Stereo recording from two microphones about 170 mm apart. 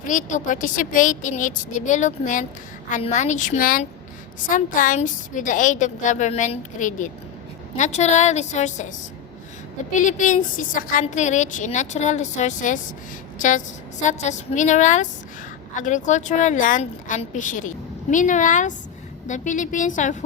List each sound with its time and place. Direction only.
0.0 s a woman's voice: 50° left (ahead or behind)
9.9 s a woman's voice: 45° left (ahead or behind)
14.0 s a woman's voice: 45° left (ahead or behind)